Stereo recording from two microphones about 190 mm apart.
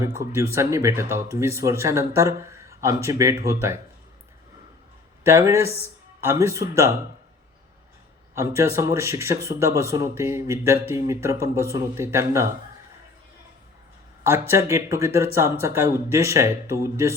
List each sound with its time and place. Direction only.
0.0 s a man's voice: 15° right (ahead or behind)
5.2 s a man's voice: 15° right (ahead or behind)
8.4 s a man's voice: 15° right (ahead or behind)
14.3 s a man's voice: 15° right (ahead or behind)